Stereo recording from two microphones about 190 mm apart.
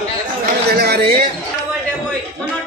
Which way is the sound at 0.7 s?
55° right (ahead or behind).